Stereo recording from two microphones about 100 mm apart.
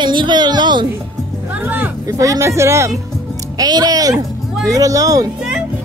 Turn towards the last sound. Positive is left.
turn(degrees=-35)  # may be behind; listen again after turning